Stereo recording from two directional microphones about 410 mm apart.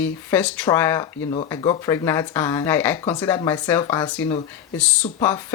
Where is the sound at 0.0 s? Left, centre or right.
Centre.